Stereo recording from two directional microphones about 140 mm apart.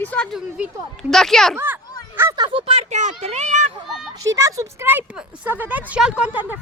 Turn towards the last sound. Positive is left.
turn(degrees=-10)  # may be behind; listen again after turning